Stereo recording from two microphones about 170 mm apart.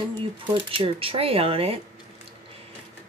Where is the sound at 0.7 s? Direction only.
30° right (ahead or behind).